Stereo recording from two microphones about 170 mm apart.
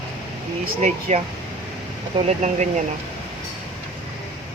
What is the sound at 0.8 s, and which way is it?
Speech, 40° right (ahead or behind).